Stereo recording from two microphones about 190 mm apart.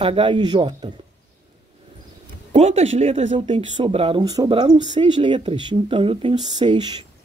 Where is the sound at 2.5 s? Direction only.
35° right (ahead or behind).